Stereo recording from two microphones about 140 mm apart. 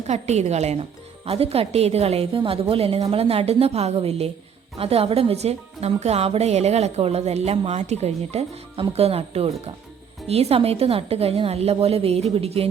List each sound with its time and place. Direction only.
0.1 s speech: 50° right (ahead or behind)